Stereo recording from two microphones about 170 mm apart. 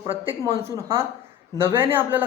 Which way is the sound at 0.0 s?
20° right (ahead or behind).